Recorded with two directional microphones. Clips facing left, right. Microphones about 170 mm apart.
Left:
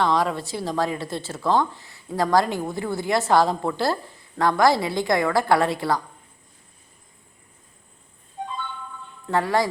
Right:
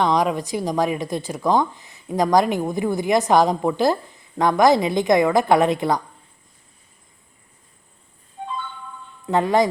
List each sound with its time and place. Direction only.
0.0 s a woman's voice: 20° right (ahead or behind)
9.2 s a woman's voice: 20° right (ahead or behind)